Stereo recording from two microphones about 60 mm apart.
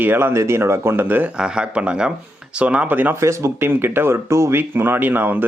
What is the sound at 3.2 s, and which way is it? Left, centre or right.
Speech, right.